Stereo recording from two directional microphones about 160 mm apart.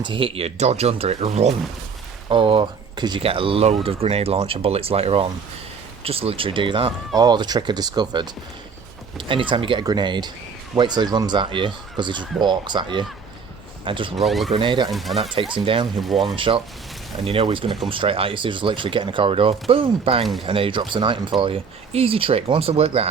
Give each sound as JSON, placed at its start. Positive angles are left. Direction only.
{"t": 0.0, "sound": "speech", "side_deg": -30}
{"t": 2.3, "sound": "speech", "side_deg": -30}
{"t": 14.2, "sound": "speech", "side_deg": 0}
{"t": 14.5, "sound": "speech", "side_deg": -30}
{"t": 14.8, "sound": "speech", "side_deg": 0}
{"t": 15.2, "sound": "speech", "side_deg": -35}
{"t": 16.0, "sound": "speech", "side_deg": 0}
{"t": 16.3, "sound": "speech", "side_deg": -30}